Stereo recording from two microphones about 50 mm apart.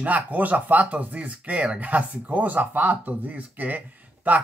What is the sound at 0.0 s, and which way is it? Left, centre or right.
Speech, right.